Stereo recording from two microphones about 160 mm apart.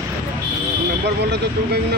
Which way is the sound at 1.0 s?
90° right.